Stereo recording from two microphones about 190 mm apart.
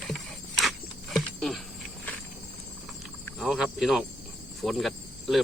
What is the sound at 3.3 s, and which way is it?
Speech, centre (ahead or behind).